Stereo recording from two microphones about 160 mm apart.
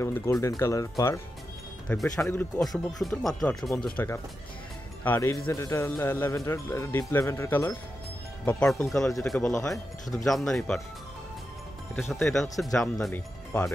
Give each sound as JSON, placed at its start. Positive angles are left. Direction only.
{"t": 0.0, "sound": "speech", "side_deg": 15}
{"t": 1.9, "sound": "a man's voice", "side_deg": 5}
{"t": 2.6, "sound": "a man's voice", "side_deg": 0}
{"t": 11.9, "sound": "speech", "side_deg": 0}